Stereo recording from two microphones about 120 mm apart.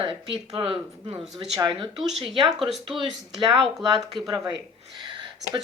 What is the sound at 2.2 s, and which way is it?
Speech, 45° right (ahead or behind).